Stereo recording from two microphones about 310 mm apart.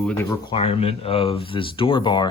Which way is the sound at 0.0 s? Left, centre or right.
Centre.